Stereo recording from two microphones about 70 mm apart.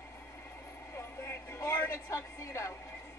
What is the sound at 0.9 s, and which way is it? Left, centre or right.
Speech, left.